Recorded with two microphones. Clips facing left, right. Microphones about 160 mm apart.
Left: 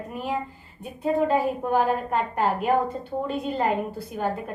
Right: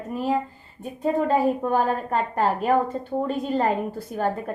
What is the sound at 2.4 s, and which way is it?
A woman's voice, 40° right (ahead or behind).